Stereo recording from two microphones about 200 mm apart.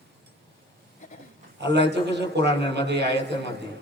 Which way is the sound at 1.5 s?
60° right (ahead or behind).